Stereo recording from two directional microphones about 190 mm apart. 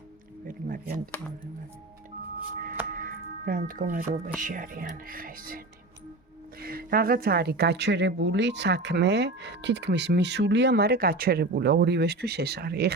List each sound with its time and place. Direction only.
0.4 s music: 45° right (ahead or behind)
2.9 s music: 45° right (ahead or behind)
4.4 s speech: 45° right (ahead or behind)